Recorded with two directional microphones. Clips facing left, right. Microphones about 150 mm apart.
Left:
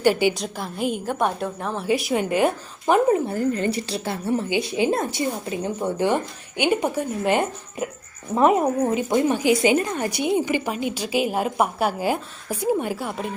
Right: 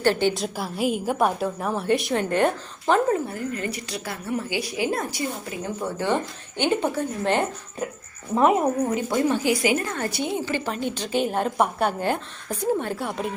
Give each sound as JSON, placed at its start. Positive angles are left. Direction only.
{"t": 0.0, "sound": "a woman's voice", "side_deg": 10}
{"t": 0.3, "sound": "a woman's voice", "side_deg": -5}
{"t": 3.2, "sound": "a woman's voice", "side_deg": 30}